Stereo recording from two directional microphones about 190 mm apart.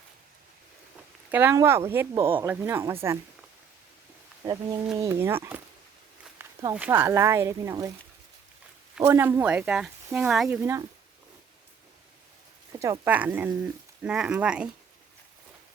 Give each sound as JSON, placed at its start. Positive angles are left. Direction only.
{"t": 1.3, "sound": "speech", "side_deg": -10}
{"t": 4.4, "sound": "speech", "side_deg": -15}
{"t": 6.4, "sound": "a sound", "side_deg": -20}
{"t": 6.7, "sound": "speech", "side_deg": -10}
{"t": 9.0, "sound": "speech", "side_deg": -10}
{"t": 10.6, "sound": "speech", "side_deg": -15}
{"t": 12.7, "sound": "speech", "side_deg": -15}